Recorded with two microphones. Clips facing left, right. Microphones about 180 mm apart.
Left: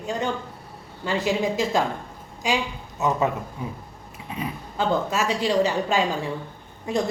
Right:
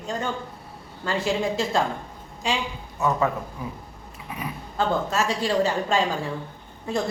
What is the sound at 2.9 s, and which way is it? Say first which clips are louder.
Speech: even; 20° left (ahead or behind).